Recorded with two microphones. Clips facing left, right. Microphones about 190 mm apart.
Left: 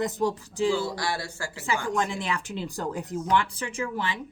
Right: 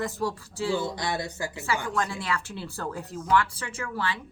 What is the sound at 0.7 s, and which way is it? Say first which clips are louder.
Speech: even; 20° right (ahead or behind).